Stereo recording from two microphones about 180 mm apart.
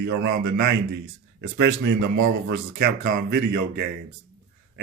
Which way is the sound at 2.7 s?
55° right (ahead or behind).